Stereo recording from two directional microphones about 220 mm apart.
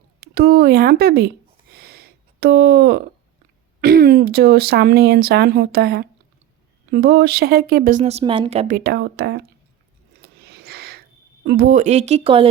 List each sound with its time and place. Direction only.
0.2 s speech: 45° right (ahead or behind)
1.7 s a sound: 45° right (ahead or behind)
3.8 s speech: 45° right (ahead or behind)
8.7 s speech: 45° right (ahead or behind)
10.2 s a sound: 45° right (ahead or behind)
11.4 s speech: 45° right (ahead or behind); by 12.5 s 25° right (ahead or behind)